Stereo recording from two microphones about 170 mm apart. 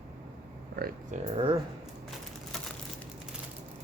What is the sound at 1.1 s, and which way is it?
Speech, 35° right (ahead or behind).